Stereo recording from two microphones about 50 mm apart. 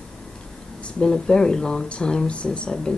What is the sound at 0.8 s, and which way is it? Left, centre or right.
Speech, centre.